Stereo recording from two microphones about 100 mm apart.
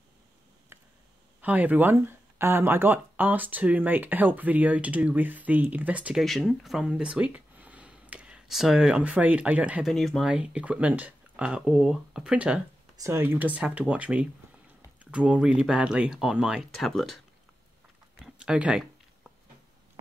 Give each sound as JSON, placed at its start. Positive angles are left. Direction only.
{"t": 1.4, "sound": "speech", "side_deg": -15}
{"t": 6.2, "sound": "speech", "side_deg": 0}
{"t": 9.8, "sound": "speech", "side_deg": 5}
{"t": 10.3, "sound": "speech", "side_deg": -10}
{"t": 12.9, "sound": "speech", "side_deg": -30}
{"t": 18.2, "sound": "a sound", "side_deg": -10}